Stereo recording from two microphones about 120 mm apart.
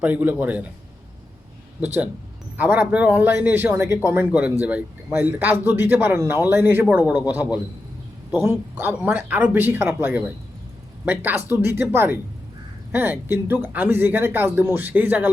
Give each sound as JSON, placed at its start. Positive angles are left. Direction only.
{"t": 0.0, "sound": "speech", "side_deg": -15}
{"t": 1.8, "sound": "speech", "side_deg": -15}
{"t": 8.3, "sound": "a man's voice", "side_deg": -20}